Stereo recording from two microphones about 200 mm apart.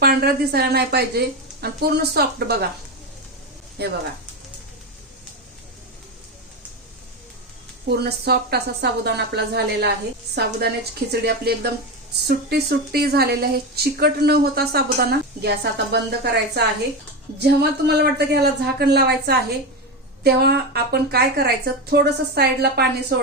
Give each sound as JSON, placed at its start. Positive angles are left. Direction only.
{"t": 0.0, "sound": "a woman's voice", "side_deg": -50}
{"t": 3.8, "sound": "speech", "side_deg": -55}
{"t": 7.9, "sound": "speech", "side_deg": -50}